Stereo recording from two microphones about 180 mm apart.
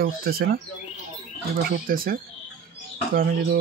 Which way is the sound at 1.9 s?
55° right (ahead or behind).